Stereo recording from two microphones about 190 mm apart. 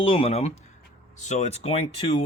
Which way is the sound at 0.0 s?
30° left (ahead or behind).